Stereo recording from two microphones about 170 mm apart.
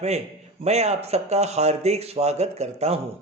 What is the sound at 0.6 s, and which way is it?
A man's voice, 40° right (ahead or behind).